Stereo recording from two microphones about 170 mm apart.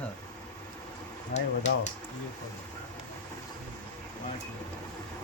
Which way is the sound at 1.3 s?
45° left (ahead or behind).